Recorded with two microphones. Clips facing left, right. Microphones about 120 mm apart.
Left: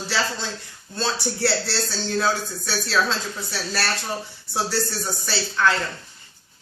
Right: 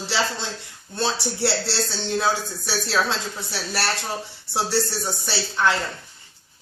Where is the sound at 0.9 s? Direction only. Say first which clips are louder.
Right 1 dB; 20° right (ahead or behind).